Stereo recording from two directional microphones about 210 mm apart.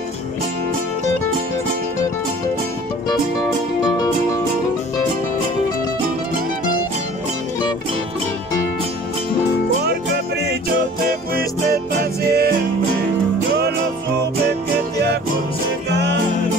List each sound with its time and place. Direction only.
11.1 s music: 45° right (ahead or behind)
15.9 s music: 55° right (ahead or behind)